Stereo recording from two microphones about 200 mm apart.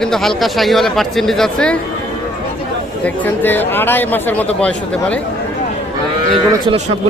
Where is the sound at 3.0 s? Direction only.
10° left (ahead or behind).